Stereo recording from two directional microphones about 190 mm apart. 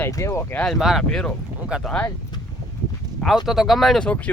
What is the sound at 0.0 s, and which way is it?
Speech, 15° left (ahead or behind).